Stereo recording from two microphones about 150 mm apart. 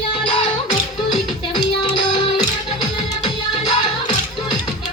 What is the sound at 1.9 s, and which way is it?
Music, 30° left (ahead or behind).